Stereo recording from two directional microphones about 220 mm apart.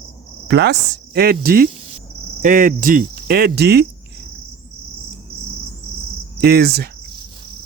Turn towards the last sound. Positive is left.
turn(degrees=-45)  # may be behind; listen again after turning